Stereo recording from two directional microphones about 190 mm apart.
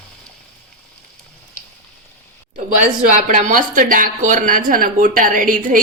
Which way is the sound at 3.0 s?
40° right (ahead or behind).